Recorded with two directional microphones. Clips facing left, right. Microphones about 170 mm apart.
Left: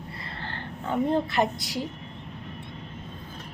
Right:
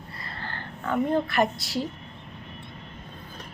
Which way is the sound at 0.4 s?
25° left (ahead or behind).